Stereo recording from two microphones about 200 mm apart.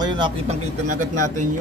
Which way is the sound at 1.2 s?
40° right (ahead or behind).